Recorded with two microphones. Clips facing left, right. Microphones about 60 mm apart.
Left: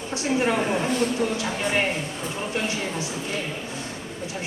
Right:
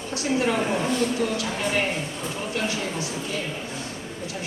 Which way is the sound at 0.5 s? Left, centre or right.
Centre.